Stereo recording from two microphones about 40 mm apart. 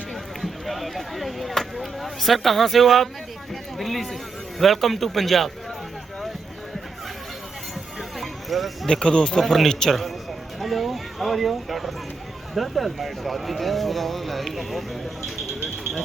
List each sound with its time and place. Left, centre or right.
0.1 s speech: centre
3.5 s a sound: centre
4.6 s speech: centre
8.2 s clip-clop: centre
8.9 s speech: left
9.4 s speech: centre
15.6 s a sound: centre